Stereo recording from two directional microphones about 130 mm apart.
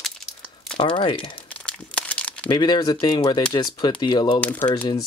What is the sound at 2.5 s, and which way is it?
Speech, 35° left (ahead or behind).